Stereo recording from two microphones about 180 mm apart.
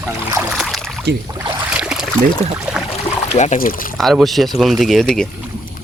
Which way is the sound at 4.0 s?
Centre (ahead or behind).